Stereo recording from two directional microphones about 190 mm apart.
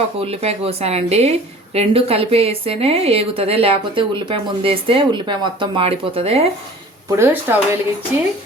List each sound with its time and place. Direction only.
0.2 s a woman's voice: 30° right (ahead or behind)
7.2 s speech: 15° right (ahead or behind)